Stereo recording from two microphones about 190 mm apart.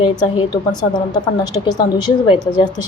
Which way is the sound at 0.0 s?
25° left (ahead or behind).